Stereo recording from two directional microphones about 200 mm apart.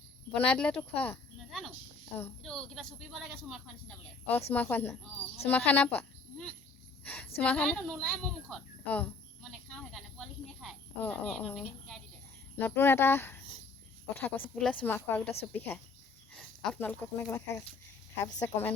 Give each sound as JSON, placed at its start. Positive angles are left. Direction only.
{"t": 0.3, "sound": "a woman's voice", "side_deg": 5}
{"t": 7.0, "sound": "a sound", "side_deg": 10}
{"t": 12.5, "sound": "speech", "side_deg": 10}